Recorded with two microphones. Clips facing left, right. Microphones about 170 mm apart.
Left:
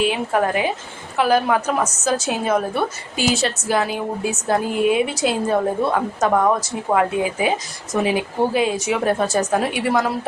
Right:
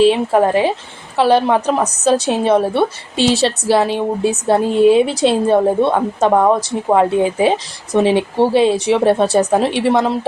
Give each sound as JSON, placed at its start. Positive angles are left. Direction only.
{"t": 0.0, "sound": "a woman's voice", "side_deg": -30}